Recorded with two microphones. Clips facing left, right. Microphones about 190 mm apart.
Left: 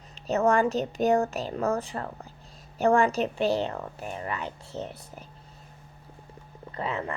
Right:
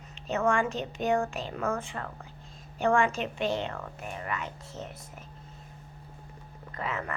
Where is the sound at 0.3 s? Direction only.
40° left (ahead or behind).